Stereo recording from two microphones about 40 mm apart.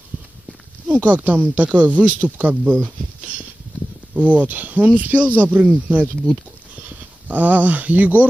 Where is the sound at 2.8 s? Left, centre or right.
Right.